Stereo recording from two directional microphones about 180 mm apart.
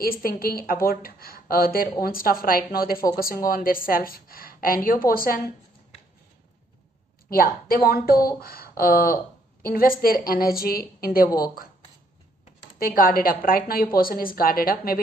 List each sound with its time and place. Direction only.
0.0 s a woman's voice: 55° left (ahead or behind)
7.2 s speech: 55° left (ahead or behind)
11.2 s a woman's voice: 20° left (ahead or behind)
12.7 s a woman's voice: 50° left (ahead or behind)